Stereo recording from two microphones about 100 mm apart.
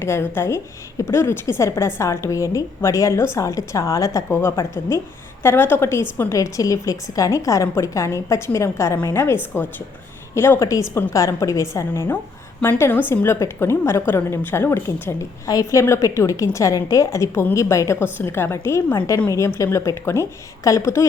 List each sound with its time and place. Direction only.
0.0 s a woman's voice: 25° left (ahead or behind)